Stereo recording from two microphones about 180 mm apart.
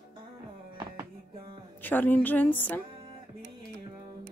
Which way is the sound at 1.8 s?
10° left (ahead or behind).